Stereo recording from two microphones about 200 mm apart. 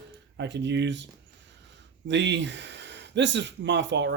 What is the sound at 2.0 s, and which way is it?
Speech, 65° right (ahead or behind).